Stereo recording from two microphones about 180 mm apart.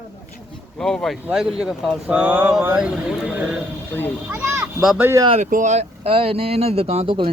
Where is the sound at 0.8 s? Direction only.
5° left (ahead or behind).